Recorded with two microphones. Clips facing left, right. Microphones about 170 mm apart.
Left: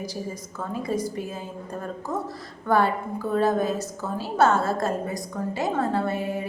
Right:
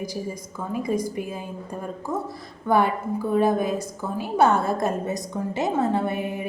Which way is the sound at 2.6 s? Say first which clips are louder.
Right 1 dB; 15° right (ahead or behind).